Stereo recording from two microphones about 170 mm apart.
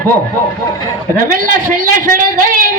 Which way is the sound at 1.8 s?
55° right (ahead or behind).